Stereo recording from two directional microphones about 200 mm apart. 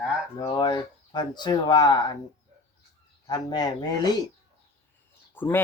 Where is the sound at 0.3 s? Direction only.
20° left (ahead or behind).